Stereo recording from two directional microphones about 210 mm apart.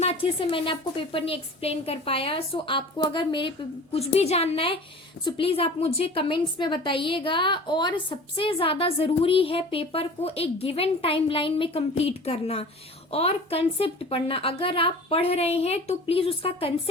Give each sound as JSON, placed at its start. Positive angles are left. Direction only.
{"t": 0.0, "sound": "a woman's voice", "side_deg": 25}